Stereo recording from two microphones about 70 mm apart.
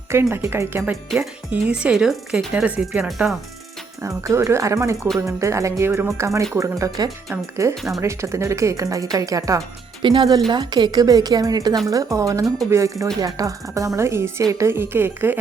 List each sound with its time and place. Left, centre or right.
0.1 s a woman's voice: right
1.5 s speech: centre
2.6 s speech: right
3.0 s speech: centre
4.0 s speech: right
10.0 s speech: right
11.9 s a woman's voice: right